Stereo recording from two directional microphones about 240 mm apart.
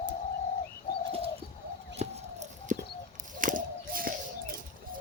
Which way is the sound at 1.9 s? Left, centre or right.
Right.